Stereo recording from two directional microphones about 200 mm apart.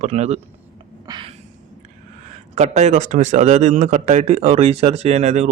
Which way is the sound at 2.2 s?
35° right (ahead or behind).